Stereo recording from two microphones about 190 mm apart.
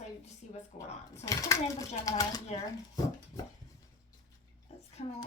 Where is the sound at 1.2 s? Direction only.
15° left (ahead or behind).